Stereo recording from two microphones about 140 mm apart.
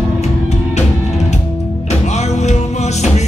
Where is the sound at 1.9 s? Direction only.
50° left (ahead or behind).